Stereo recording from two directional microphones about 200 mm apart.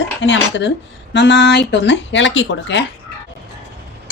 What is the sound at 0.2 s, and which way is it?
Speech, 65° left (ahead or behind).